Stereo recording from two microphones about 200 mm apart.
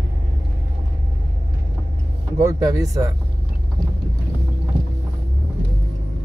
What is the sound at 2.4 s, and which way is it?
Speech, 15° right (ahead or behind).